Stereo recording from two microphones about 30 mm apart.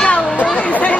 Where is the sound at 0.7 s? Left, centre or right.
Left.